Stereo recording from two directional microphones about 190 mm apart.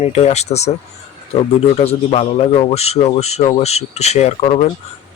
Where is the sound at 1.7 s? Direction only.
30° left (ahead or behind).